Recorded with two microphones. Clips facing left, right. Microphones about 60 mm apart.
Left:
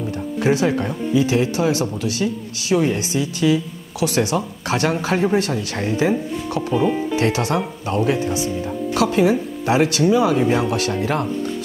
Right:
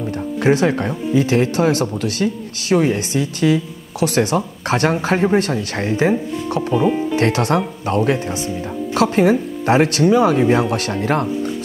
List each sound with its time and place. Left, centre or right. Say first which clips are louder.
0.4 s speech: right 2 dB; right
6.7 s speech: right 2 dB; centre
7.2 s speech: right 3 dB; right
10.4 s speech: right 3 dB; centre
11.0 s speech: right 3 dB; right